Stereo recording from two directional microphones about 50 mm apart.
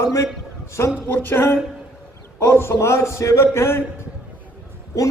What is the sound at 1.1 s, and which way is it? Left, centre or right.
A man's voice, left.